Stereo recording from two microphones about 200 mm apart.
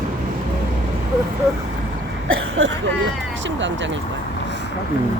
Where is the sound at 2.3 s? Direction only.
65° right (ahead or behind).